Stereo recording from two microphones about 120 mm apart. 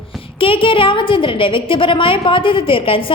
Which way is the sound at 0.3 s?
45° left (ahead or behind).